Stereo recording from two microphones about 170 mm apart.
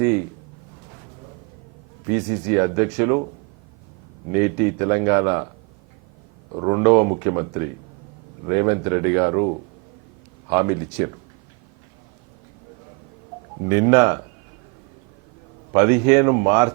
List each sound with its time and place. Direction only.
2.1 s speech: 15° right (ahead or behind)
4.4 s speech: 15° right (ahead or behind)
6.5 s speech: 20° right (ahead or behind)
10.5 s speech: 20° right (ahead or behind)
13.7 s speech: 15° right (ahead or behind)
15.7 s speech: 20° right (ahead or behind)